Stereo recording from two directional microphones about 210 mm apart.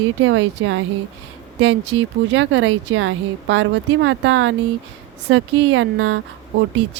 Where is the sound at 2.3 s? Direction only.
70° right (ahead or behind).